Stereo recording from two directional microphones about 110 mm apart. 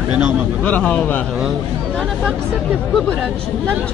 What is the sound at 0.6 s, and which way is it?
Speech, 15° left (ahead or behind).